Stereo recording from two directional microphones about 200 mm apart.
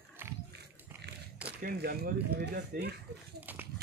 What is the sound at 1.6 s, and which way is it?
Speech, 50° right (ahead or behind).